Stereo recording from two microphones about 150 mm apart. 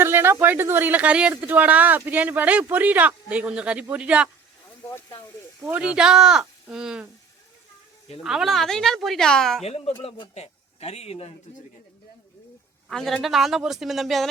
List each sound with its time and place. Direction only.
0.0 s speech: 15° right (ahead or behind)
5.6 s speech: 5° right (ahead or behind)
8.2 s speech: centre (ahead or behind)
9.6 s speech: 40° left (ahead or behind)
12.9 s speech: 5° left (ahead or behind)